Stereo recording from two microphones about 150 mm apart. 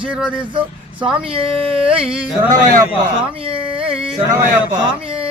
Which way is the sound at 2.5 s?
60° right (ahead or behind).